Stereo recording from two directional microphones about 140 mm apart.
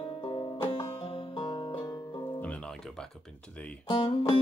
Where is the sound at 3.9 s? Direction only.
35° left (ahead or behind).